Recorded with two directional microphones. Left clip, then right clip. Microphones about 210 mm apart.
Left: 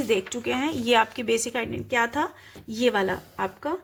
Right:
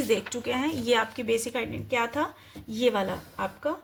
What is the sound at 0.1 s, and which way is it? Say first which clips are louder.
Speech: left 3 dB; 25° left (ahead or behind).